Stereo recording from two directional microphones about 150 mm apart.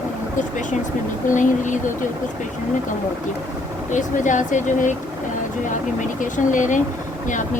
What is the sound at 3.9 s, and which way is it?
Speech, 55° left (ahead or behind).